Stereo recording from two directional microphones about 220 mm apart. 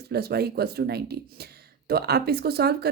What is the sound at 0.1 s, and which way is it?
Speech, 45° right (ahead or behind).